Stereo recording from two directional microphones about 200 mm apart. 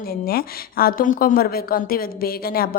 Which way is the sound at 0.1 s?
50° left (ahead or behind).